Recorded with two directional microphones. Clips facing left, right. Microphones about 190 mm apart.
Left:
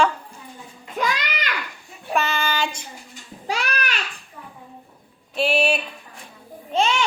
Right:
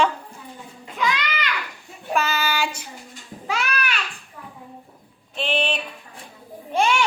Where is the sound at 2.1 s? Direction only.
Centre (ahead or behind).